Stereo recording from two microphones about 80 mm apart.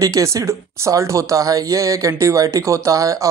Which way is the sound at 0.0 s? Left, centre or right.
Right.